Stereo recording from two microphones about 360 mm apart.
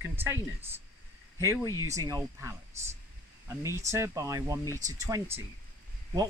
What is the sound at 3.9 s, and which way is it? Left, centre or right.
Speech, centre.